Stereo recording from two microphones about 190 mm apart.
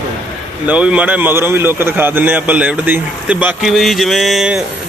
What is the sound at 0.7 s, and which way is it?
A man's voice, 5° right (ahead or behind).